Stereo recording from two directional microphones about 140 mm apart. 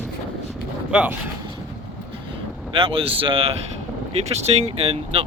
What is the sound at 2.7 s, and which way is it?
Speech, 40° right (ahead or behind).